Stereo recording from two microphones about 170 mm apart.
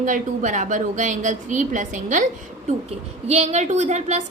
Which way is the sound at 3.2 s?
40° right (ahead or behind).